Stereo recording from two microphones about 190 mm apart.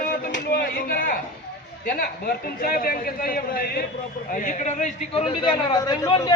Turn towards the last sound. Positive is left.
turn(degrees=20)  # may be behind; listen again after turning